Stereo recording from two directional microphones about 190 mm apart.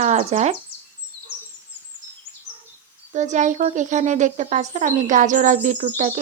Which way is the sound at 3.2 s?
40° right (ahead or behind).